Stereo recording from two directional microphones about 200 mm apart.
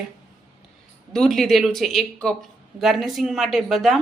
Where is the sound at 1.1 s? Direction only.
Centre (ahead or behind).